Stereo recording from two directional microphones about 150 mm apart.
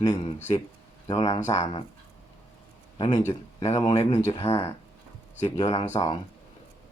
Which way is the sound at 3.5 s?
45° left (ahead or behind).